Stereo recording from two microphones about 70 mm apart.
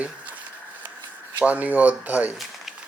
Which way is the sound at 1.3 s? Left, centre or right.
Right.